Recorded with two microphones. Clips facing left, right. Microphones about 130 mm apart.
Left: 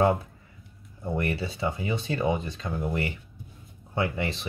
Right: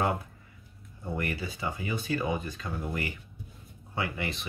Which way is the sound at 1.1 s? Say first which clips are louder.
Left 4 dB; 30° left (ahead or behind).